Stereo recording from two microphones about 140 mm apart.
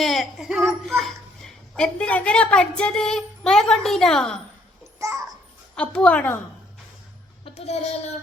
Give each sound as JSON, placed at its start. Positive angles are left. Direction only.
{"t": 0.0, "sound": "a child's voice", "side_deg": 0}
{"t": 4.9, "sound": "a sound", "side_deg": -20}
{"t": 5.7, "sound": "a woman's voice", "side_deg": 10}
{"t": 7.4, "sound": "speech", "side_deg": 45}